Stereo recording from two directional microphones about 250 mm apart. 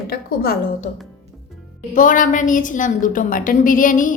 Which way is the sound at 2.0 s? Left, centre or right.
Left.